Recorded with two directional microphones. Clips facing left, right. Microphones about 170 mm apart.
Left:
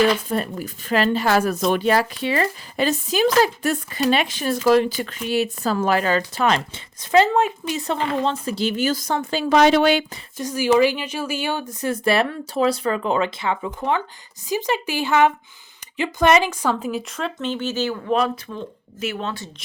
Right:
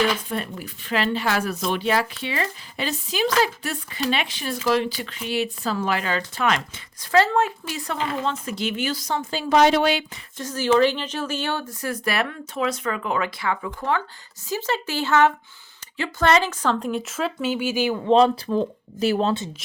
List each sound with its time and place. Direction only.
0.3 s speech: 40° left (ahead or behind)
7.0 s speech: 20° left (ahead or behind); by 9.9 s 85° left
10.3 s a woman's voice: 10° left (ahead or behind); by 19.4 s 35° right (ahead or behind)